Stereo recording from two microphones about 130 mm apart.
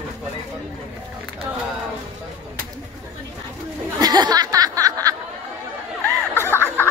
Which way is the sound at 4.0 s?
30° right (ahead or behind).